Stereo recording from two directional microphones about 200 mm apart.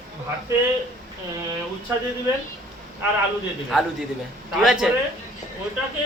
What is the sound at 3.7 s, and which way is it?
A man's voice, centre (ahead or behind).